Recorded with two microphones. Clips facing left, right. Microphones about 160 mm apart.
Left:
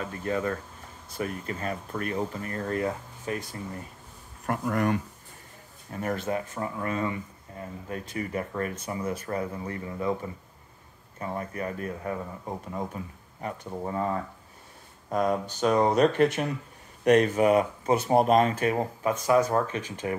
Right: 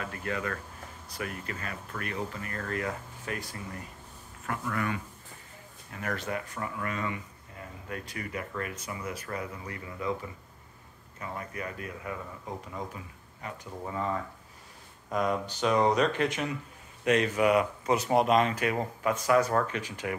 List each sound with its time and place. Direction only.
0.0 s speech: 30° left (ahead or behind)
4.5 s speech: 45° left (ahead or behind)
5.9 s speech: 35° left (ahead or behind)
11.1 s speech: 35° left (ahead or behind)
15.2 s speech: 45° left (ahead or behind)
18.5 s speech: 30° left (ahead or behind)